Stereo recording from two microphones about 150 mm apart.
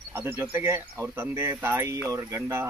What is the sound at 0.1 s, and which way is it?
Speech, 15° right (ahead or behind).